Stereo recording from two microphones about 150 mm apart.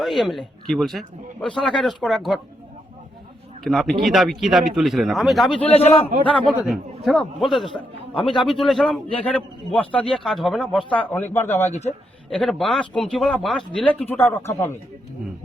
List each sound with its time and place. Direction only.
0.0 s a man's voice: centre (ahead or behind)
3.6 s a man's voice: centre (ahead or behind)
5.6 s a man's voice: 40° left (ahead or behind)
6.5 s a man's voice: centre (ahead or behind); by 11.7 s 15° left (ahead or behind)
11.7 s a man's voice: 45° left (ahead or behind)
12.3 s a man's voice: centre (ahead or behind)
14.3 s speech: 15° left (ahead or behind)